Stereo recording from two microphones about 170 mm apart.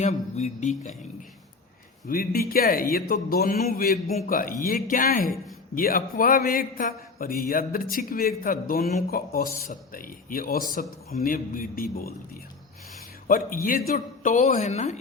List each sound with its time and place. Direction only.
0.0 s speech: 40° left (ahead or behind)
2.0 s speech: 60° left (ahead or behind)
13.2 s speech: 55° left (ahead or behind)